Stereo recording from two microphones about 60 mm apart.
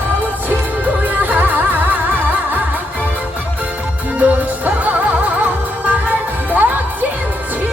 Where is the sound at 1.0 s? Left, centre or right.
Right.